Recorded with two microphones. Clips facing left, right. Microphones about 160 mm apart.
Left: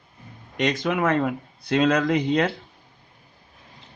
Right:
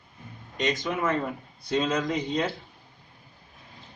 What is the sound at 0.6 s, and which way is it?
Speech, 70° left (ahead or behind).